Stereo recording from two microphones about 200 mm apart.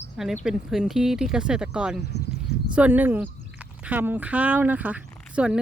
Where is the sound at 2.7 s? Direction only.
5° right (ahead or behind).